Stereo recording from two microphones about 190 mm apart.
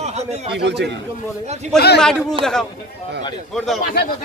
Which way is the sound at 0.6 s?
65° right (ahead or behind).